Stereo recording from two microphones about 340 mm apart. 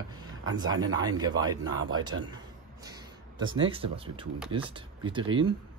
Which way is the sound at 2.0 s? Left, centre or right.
Right.